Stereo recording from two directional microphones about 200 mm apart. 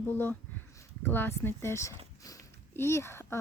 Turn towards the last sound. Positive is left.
turn(degrees=10)  # may be behind; listen again after turning